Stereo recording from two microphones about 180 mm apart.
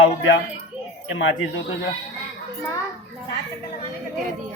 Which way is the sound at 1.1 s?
90° left.